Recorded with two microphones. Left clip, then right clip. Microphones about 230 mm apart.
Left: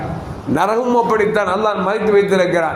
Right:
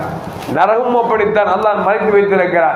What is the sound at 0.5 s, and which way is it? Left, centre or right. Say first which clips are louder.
A man's voice: right 3 dB; left.